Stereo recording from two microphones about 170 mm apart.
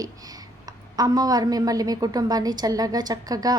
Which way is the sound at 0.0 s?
20° right (ahead or behind).